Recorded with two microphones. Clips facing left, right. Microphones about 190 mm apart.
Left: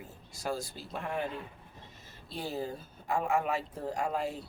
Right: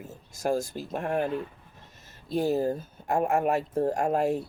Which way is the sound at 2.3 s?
45° right (ahead or behind).